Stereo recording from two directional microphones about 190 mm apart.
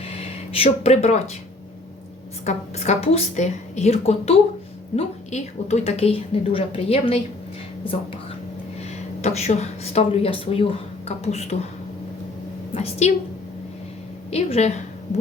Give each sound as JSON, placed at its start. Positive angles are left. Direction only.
{"t": 0.0, "sound": "speech", "side_deg": 30}
{"t": 2.4, "sound": "a woman's voice", "side_deg": 35}
{"t": 8.8, "sound": "speech", "side_deg": 35}
{"t": 12.7, "sound": "a woman's voice", "side_deg": 35}
{"t": 14.3, "sound": "a woman's voice", "side_deg": 35}